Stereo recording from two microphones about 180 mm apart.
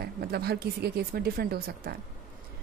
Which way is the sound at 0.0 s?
60° right (ahead or behind).